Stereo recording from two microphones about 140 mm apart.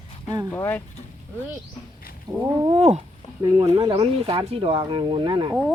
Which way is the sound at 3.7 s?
35° right (ahead or behind).